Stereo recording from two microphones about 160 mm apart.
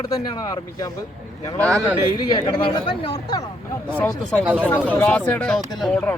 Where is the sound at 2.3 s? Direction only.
30° left (ahead or behind).